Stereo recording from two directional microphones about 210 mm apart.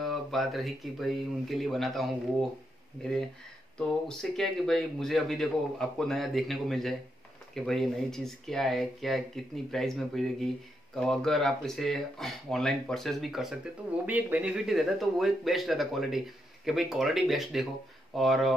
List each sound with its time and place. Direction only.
0.0 s a man's voice: centre (ahead or behind)
4.2 s a man's voice: centre (ahead or behind)